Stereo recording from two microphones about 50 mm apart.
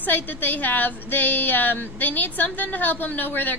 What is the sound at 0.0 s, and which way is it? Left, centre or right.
Speech, left.